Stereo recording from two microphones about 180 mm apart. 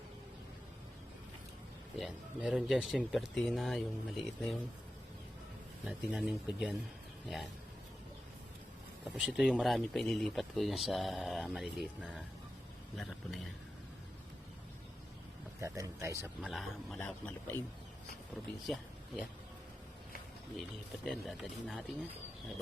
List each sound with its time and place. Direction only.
2.0 s speech: centre (ahead or behind)
5.8 s speech: 5° right (ahead or behind)
9.1 s speech: 5° right (ahead or behind)
15.6 s speech: 15° right (ahead or behind)
16.4 s speech: centre (ahead or behind)
18.6 s speech: centre (ahead or behind)
21.0 s speech: centre (ahead or behind)